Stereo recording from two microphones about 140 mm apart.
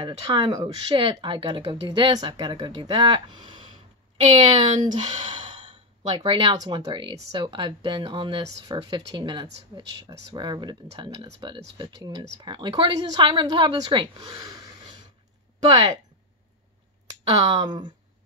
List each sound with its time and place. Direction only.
0.0 s speech: 30° right (ahead or behind)
4.2 s speech: 50° right (ahead or behind)
5.2 s speech: 35° right (ahead or behind)
14.5 s a sound: 25° right (ahead or behind)
17.3 s speech: 35° right (ahead or behind)